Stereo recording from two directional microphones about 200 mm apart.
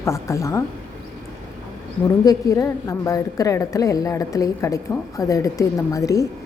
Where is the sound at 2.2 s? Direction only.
15° left (ahead or behind).